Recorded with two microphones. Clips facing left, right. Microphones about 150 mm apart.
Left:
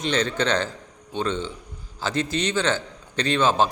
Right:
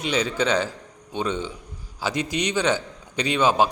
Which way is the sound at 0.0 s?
10° right (ahead or behind).